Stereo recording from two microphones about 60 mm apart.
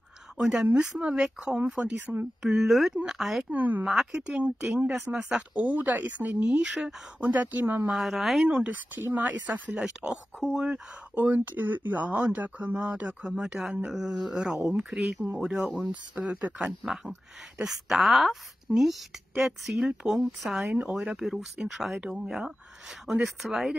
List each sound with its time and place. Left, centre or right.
0.4 s speech: centre
2.4 s speech: centre
3.5 s speech: right
3.8 s speech: centre
4.1 s speech: centre
6.4 s speech: centre
6.7 s speech: centre
7.2 s speech: right
7.9 s speech: centre
8.5 s speech: right
9.8 s speech: centre
11.1 s speech: right
13.2 s speech: centre
16.5 s speech: centre